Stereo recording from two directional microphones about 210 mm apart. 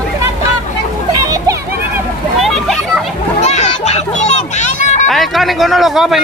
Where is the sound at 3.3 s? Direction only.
30° left (ahead or behind).